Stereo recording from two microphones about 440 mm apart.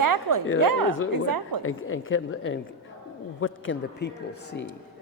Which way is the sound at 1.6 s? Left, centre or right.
Left.